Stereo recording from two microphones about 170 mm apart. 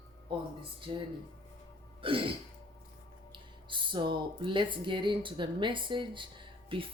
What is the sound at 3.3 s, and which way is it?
Speech, 30° right (ahead or behind).